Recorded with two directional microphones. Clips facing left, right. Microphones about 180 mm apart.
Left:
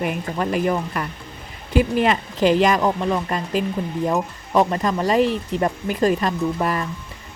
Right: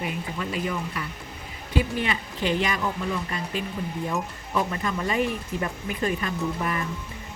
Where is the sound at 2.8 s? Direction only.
75° left (ahead or behind).